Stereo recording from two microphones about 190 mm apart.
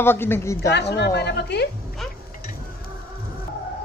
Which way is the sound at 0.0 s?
10° left (ahead or behind).